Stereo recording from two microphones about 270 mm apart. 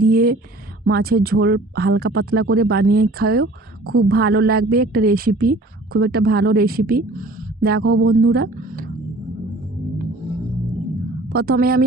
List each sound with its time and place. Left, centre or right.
0.0 s a sound: right
0.9 s a woman's voice: right
11.3 s a woman's voice: right